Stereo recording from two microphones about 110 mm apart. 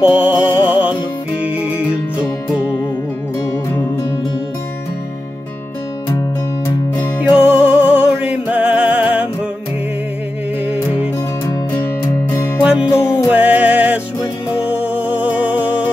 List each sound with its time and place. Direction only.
0.0 s music: 10° right (ahead or behind)
2.1 s music: 10° right (ahead or behind)
7.2 s music: 10° right (ahead or behind)
10.7 s music: 15° right (ahead or behind)
12.0 s music: 25° left (ahead or behind)
12.6 s music: 10° right (ahead or behind)
12.9 s music: 25° left (ahead or behind)
13.3 s music: 15° right (ahead or behind)